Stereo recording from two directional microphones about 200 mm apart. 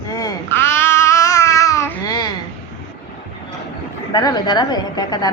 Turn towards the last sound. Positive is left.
turn(degrees=20)  # may be behind; listen again after turning